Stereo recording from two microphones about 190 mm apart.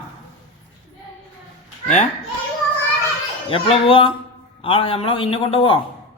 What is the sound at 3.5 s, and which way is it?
A man's voice, 30° left (ahead or behind).